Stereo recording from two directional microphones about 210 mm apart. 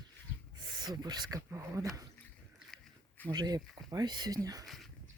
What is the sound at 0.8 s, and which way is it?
Speech, 20° right (ahead or behind).